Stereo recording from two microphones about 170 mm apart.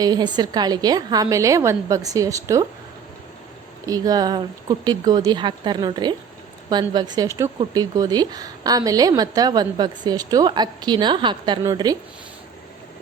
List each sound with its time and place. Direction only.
0.0 s a woman's voice: 25° right (ahead or behind)
3.8 s a woman's voice: 20° right (ahead or behind)